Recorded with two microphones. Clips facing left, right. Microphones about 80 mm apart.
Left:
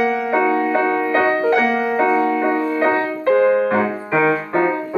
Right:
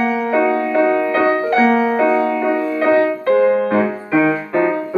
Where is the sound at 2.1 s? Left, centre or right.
Centre.